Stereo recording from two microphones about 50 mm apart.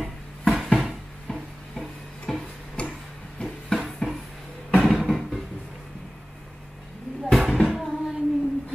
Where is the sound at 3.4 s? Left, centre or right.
Centre.